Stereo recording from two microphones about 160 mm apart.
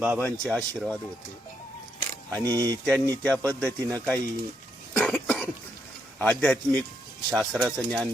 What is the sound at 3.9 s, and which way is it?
Speech, 10° left (ahead or behind).